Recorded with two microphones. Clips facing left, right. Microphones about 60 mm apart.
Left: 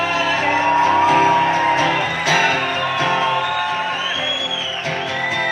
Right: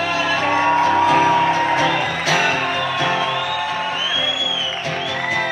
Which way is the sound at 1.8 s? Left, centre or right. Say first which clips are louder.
Left 1 dB; centre.